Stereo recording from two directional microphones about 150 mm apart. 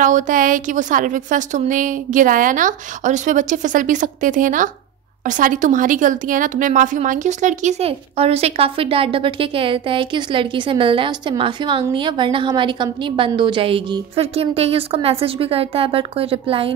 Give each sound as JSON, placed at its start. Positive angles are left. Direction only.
{"t": 0.0, "sound": "a woman's voice", "side_deg": -60}